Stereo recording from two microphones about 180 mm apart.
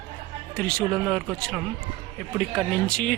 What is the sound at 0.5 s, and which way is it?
Speech, 5° left (ahead or behind).